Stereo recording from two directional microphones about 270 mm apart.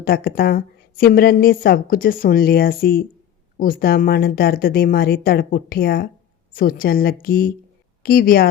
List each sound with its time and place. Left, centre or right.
0.0 s a woman's voice: left